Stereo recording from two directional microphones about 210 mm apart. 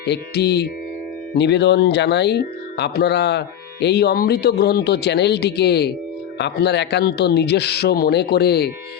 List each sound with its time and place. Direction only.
0.0 s speech: 50° left (ahead or behind)